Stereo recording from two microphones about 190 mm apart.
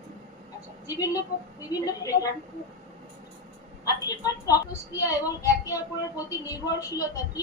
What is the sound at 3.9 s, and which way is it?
A woman's voice, 20° left (ahead or behind).